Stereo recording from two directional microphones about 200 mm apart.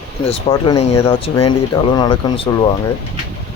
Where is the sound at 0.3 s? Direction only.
30° left (ahead or behind).